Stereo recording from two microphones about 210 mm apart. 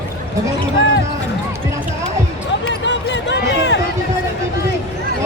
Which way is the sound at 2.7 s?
55° left (ahead or behind).